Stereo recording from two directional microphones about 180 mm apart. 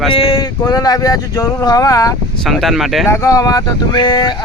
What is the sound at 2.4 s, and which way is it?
Speech, centre (ahead or behind).